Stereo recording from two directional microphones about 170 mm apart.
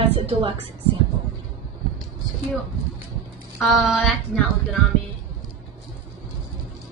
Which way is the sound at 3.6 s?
Centre (ahead or behind).